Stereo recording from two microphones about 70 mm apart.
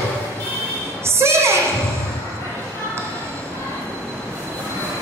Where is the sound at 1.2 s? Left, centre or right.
Right.